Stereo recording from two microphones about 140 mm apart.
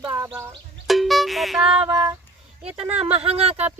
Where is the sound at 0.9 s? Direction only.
Centre (ahead or behind).